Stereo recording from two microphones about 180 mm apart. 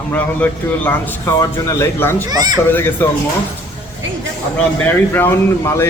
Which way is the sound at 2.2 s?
20° right (ahead or behind).